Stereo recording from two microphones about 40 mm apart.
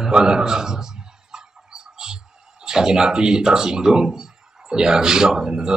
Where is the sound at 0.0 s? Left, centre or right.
Centre.